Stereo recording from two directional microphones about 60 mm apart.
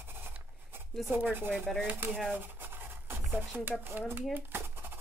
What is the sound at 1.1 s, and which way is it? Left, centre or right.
Speech, right.